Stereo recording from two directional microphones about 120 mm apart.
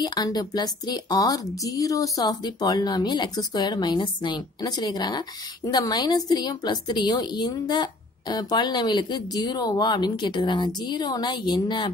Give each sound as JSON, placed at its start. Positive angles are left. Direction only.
{"t": 0.0, "sound": "a woman's voice", "side_deg": 35}